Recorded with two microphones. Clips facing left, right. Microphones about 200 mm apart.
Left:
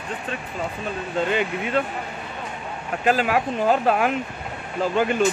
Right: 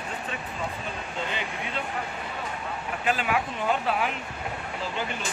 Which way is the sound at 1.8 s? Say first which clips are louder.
Left 11 dB; 50° left (ahead or behind).